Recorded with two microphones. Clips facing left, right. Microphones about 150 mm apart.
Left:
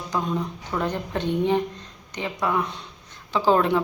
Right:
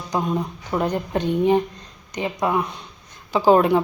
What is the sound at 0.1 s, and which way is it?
A woman's voice, 15° right (ahead or behind).